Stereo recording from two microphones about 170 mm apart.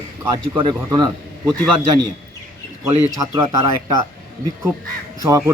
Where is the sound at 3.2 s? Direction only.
25° right (ahead or behind).